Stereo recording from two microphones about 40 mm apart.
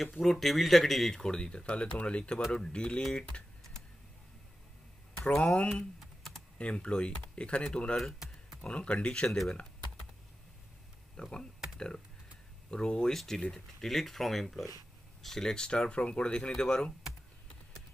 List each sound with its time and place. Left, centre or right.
0.2 s speech: centre
1.2 s speech: centre
5.1 s speech: left
5.9 s computer keyboard: centre
6.6 s speech: left
11.1 s speech: left
12.7 s speech: left